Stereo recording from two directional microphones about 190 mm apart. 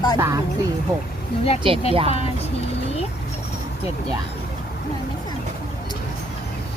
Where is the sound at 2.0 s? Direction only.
30° left (ahead or behind).